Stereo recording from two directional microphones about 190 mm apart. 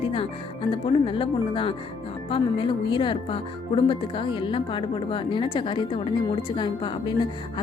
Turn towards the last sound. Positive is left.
turn(degrees=25)  # may be behind; listen again after turning